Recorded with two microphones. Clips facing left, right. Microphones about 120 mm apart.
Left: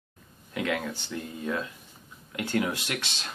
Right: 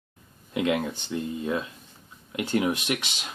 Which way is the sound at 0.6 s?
20° right (ahead or behind).